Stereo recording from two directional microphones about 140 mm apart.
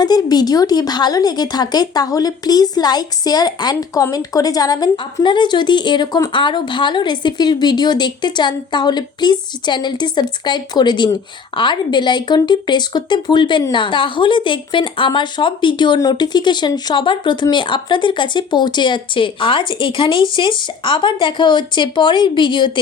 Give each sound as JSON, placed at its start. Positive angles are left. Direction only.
{"t": 0.0, "sound": "speech", "side_deg": 30}